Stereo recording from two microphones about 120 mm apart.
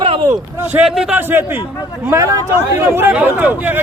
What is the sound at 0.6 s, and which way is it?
Speech, 15° right (ahead or behind).